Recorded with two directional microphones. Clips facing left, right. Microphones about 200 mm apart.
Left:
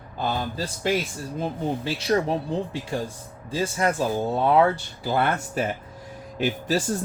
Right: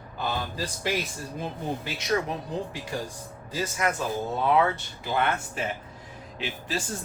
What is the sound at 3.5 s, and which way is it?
Speech, 30° left (ahead or behind).